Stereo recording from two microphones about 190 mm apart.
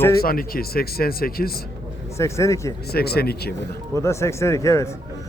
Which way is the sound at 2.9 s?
55° left (ahead or behind).